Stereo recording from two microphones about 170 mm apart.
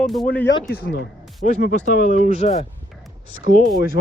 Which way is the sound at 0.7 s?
70° left (ahead or behind).